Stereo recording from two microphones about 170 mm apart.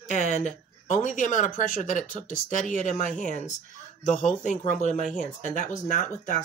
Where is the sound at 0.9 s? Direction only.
45° left (ahead or behind).